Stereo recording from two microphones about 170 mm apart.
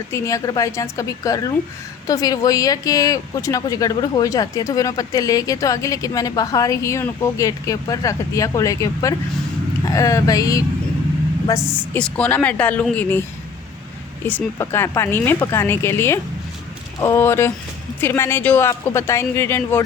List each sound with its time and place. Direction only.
0.1 s speech: 20° left (ahead or behind)
14.3 s speech: 10° left (ahead or behind)